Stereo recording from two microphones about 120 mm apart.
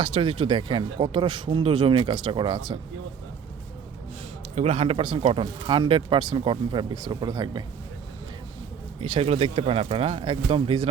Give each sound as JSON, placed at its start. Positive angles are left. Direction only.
{"t": 0.0, "sound": "speech", "side_deg": -50}
{"t": 4.5, "sound": "speech", "side_deg": -65}
{"t": 9.0, "sound": "speech", "side_deg": -55}